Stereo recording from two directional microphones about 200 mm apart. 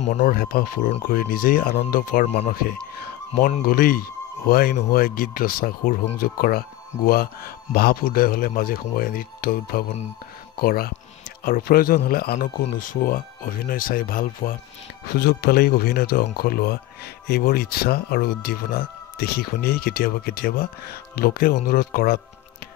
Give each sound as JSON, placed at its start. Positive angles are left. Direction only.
{"t": 0.0, "sound": "speech", "side_deg": 40}